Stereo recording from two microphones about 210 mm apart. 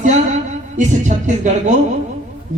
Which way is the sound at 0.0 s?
35° right (ahead or behind).